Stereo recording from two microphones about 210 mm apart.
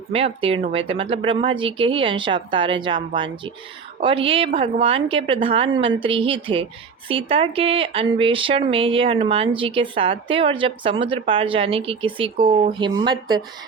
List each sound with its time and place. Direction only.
0.1 s a woman's voice: 25° right (ahead or behind)